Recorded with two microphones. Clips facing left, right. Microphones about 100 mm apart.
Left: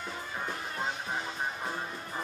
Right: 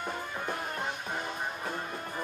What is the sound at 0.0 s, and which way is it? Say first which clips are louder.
Music: right 2 dB; 55° right (ahead or behind).